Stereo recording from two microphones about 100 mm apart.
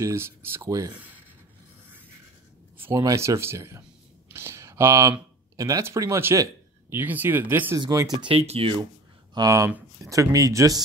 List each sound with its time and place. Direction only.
0.0 s speech: 25° right (ahead or behind)
3.0 s speech: 35° right (ahead or behind)
4.3 s a sound: 25° right (ahead or behind)
5.6 s speech: 30° right (ahead or behind)
7.0 s speech: 20° right (ahead or behind)
7.8 s speech: 40° right (ahead or behind)
8.2 s speech: 75° right (ahead or behind)
9.4 s speech: 45° right (ahead or behind)
10.0 s speech: 35° right (ahead or behind)